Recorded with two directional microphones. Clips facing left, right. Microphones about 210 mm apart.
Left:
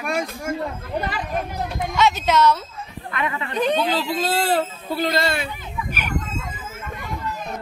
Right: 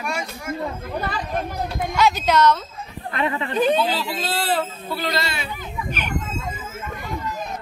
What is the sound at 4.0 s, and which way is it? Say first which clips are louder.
Speech: left 4 dB; 45° left (ahead or behind).